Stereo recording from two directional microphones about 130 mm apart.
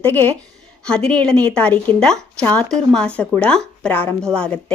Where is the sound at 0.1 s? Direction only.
15° left (ahead or behind).